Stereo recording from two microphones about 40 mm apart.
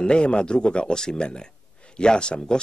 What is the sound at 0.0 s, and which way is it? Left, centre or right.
Speech, left.